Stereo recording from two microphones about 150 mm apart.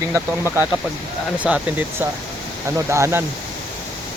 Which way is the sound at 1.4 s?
10° right (ahead or behind).